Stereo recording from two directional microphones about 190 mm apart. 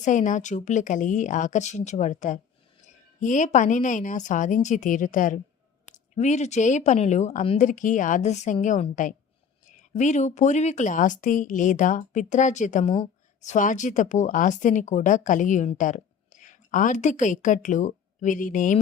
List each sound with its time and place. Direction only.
0.0 s speech: 40° left (ahead or behind)